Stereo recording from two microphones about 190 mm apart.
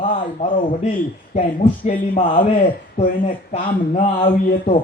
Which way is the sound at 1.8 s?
45° left (ahead or behind).